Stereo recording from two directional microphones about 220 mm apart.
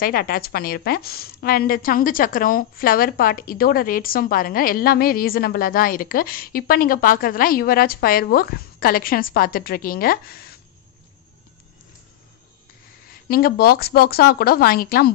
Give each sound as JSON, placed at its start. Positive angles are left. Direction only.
{"t": 0.0, "sound": "a woman's voice", "side_deg": 40}
{"t": 13.3, "sound": "a woman's voice", "side_deg": 40}